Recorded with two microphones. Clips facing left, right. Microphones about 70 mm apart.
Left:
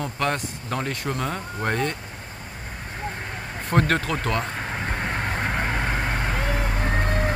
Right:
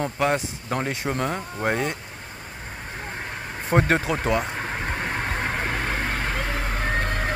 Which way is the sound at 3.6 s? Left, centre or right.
Centre.